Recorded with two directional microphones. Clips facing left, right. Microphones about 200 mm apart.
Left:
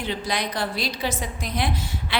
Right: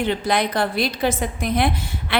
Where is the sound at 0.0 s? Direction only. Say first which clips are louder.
Right 7 dB; 55° right (ahead or behind).